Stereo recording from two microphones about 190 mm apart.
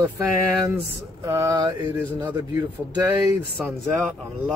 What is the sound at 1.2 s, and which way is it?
Speech, 15° right (ahead or behind).